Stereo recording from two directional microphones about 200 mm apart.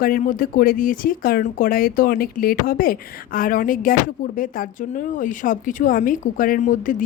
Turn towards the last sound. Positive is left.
turn(degrees=40)  # may be behind; listen again after turning